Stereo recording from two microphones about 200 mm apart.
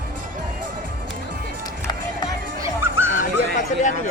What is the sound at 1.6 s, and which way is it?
Music, 20° left (ahead or behind).